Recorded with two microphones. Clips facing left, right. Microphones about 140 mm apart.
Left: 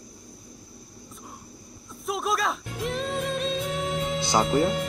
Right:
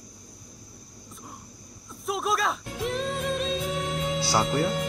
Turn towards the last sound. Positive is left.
turn(degrees=0)  # may be behind; listen again after turning